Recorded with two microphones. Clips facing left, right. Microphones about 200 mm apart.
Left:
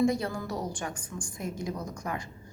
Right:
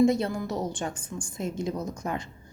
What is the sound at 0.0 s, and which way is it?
A woman's voice, 25° right (ahead or behind).